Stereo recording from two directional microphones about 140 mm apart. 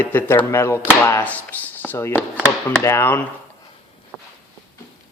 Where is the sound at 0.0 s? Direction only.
15° left (ahead or behind).